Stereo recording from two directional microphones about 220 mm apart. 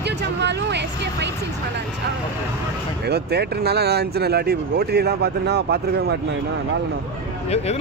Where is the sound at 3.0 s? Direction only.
45° right (ahead or behind).